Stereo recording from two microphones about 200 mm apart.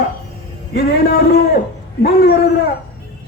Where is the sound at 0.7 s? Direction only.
50° left (ahead or behind).